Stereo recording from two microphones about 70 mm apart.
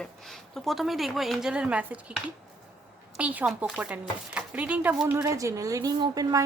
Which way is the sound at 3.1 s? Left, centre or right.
Centre.